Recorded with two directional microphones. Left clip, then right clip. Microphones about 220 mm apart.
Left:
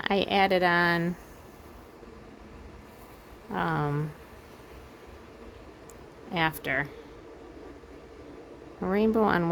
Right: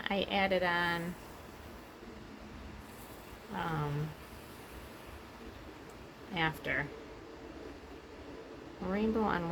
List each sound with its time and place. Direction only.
0.0 s speech: 55° left (ahead or behind)
3.5 s speech: 50° left (ahead or behind)
6.3 s speech: 50° left (ahead or behind)
8.9 s speech: 55° left (ahead or behind)